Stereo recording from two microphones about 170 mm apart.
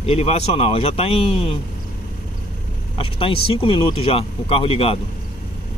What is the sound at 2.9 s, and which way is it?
Speech, 30° left (ahead or behind).